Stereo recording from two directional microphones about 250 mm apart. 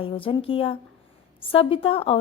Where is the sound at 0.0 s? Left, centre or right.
Left.